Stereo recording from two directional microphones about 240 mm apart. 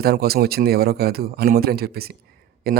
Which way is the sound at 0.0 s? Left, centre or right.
Right.